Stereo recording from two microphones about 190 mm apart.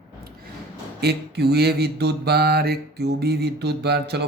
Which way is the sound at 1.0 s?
60° right (ahead or behind).